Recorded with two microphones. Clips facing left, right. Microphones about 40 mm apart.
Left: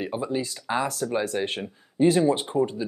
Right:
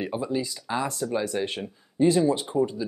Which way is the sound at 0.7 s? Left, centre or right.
Left.